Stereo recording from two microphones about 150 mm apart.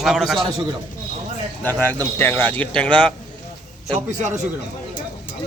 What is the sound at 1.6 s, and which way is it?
Speech, 10° left (ahead or behind).